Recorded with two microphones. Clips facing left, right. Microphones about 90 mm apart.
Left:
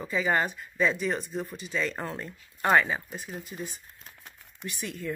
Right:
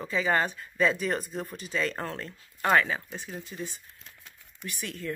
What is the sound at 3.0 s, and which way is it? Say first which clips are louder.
Speech: even; 5° left (ahead or behind).